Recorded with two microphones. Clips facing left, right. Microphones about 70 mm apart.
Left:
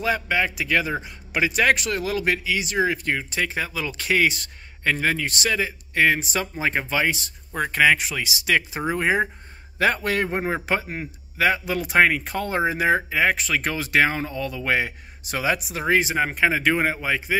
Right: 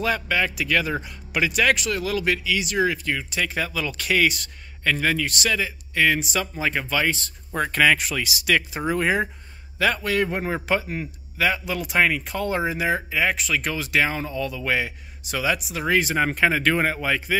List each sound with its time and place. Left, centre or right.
0.0 s speech: left
8.3 s speech: left
9.8 s a man's voice: left
16.2 s speech: centre